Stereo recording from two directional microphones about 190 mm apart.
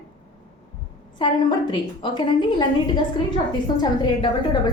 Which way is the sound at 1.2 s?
25° left (ahead or behind).